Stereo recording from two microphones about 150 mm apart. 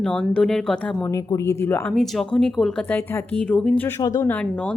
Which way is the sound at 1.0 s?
20° left (ahead or behind).